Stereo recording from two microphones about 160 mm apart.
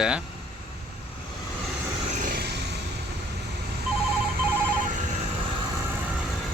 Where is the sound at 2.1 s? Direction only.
55° right (ahead or behind).